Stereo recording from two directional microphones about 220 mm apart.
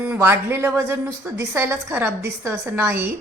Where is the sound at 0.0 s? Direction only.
10° right (ahead or behind).